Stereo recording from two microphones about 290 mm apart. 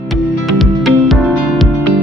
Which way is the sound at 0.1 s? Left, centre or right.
Centre.